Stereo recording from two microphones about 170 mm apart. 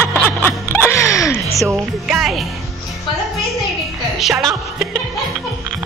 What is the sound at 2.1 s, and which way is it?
Speech, centre (ahead or behind).